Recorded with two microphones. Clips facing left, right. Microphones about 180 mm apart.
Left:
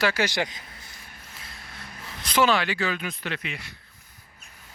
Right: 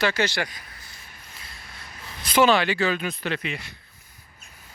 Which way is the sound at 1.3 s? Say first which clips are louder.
Left 1 dB; centre (ahead or behind).